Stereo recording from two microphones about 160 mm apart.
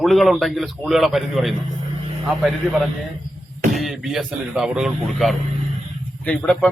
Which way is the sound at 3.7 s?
Centre (ahead or behind).